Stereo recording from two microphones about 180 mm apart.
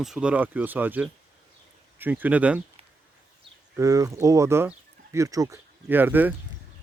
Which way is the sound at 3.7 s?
20° right (ahead or behind).